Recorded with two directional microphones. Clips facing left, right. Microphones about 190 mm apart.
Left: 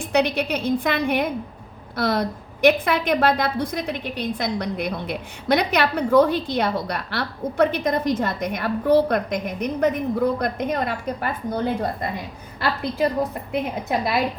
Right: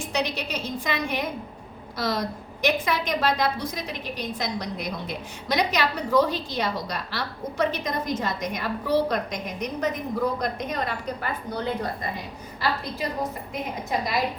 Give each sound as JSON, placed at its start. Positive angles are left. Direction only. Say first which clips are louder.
{"t": 0.1, "sound": "a woman's voice", "louder": "left 8 dB", "side_deg": 60}
{"t": 13.5, "sound": "a woman's voice", "louder": "left 5 dB", "side_deg": 60}